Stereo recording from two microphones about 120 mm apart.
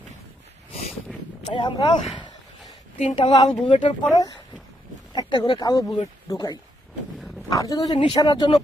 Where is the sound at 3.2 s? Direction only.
50° left (ahead or behind).